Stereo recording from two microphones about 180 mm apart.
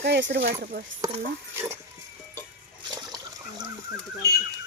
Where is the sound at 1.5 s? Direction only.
15° right (ahead or behind).